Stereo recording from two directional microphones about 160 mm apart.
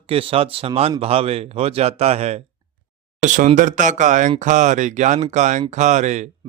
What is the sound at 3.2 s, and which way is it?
A man's voice, 55° right (ahead or behind).